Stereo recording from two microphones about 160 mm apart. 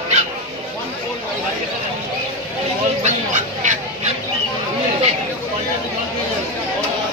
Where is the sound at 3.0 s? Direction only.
50° right (ahead or behind).